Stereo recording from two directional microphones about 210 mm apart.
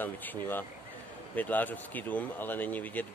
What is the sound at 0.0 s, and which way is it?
Speech, 10° left (ahead or behind).